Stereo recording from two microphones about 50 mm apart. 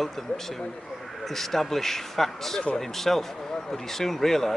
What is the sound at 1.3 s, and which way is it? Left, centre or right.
A man's voice, centre.